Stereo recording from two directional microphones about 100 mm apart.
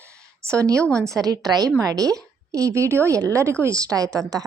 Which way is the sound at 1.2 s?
40° right (ahead or behind).